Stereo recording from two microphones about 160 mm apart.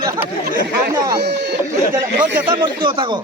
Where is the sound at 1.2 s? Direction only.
90° right.